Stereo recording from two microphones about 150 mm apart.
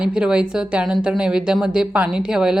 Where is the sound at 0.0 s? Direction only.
5° right (ahead or behind).